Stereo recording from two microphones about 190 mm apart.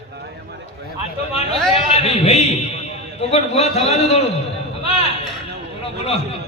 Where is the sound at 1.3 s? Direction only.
30° left (ahead or behind).